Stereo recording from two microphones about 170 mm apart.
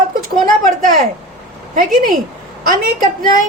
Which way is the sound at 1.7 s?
50° right (ahead or behind).